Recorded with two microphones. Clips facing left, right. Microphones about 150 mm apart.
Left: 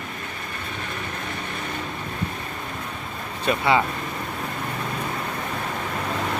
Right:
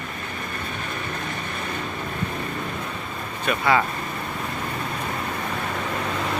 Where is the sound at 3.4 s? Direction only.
25° left (ahead or behind).